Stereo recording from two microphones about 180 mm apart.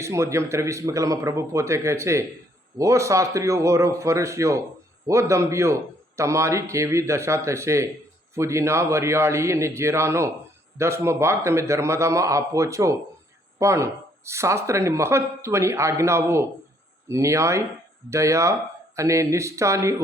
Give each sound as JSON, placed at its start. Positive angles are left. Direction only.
{"t": 0.0, "sound": "speech", "side_deg": -15}